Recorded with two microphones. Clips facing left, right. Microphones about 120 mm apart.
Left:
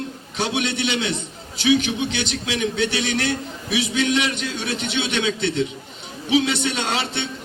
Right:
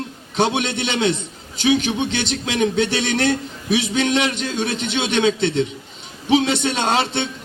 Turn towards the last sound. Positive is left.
turn(degrees=-45)  # may be behind; listen again after turning